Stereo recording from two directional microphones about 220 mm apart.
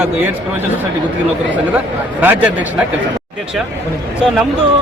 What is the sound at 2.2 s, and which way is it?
Speech, 5° right (ahead or behind).